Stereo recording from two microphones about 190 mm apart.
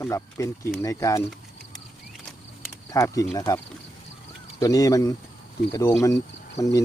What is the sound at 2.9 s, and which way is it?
Speech, 15° left (ahead or behind).